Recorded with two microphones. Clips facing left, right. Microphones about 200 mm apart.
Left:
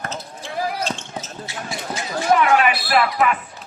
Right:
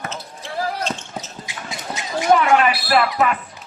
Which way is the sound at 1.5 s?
20° right (ahead or behind).